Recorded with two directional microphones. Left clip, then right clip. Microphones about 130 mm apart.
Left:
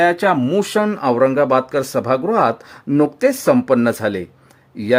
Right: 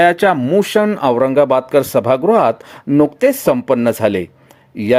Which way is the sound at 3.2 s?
15° right (ahead or behind).